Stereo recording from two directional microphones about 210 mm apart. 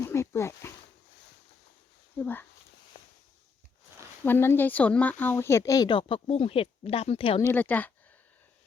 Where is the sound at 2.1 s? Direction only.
10° left (ahead or behind).